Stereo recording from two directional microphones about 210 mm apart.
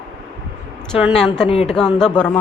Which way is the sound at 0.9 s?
Centre (ahead or behind).